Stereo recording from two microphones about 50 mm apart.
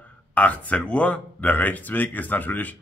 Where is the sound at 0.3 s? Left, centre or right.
Left.